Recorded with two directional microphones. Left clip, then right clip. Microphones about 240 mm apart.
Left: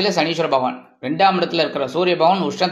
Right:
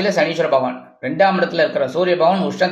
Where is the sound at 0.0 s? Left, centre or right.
Centre.